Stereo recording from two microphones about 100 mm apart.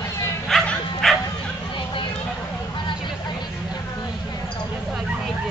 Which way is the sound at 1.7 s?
55° left (ahead or behind).